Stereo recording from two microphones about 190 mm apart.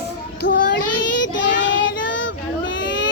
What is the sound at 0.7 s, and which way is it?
Child singing, 70° left (ahead or behind).